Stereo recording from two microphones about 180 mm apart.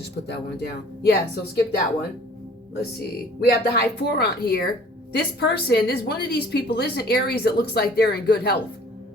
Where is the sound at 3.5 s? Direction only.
65° left (ahead or behind).